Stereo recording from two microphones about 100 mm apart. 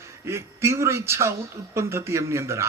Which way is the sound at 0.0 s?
25° right (ahead or behind).